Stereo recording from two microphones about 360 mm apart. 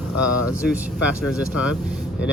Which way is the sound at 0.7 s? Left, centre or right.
Centre.